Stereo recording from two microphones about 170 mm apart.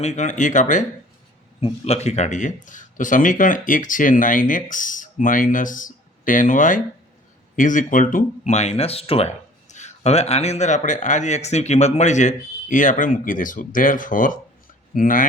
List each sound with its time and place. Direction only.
0.0 s speech: 40° left (ahead or behind)